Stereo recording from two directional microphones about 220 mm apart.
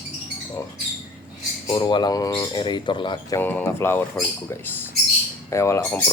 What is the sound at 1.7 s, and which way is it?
Speech, 20° left (ahead or behind).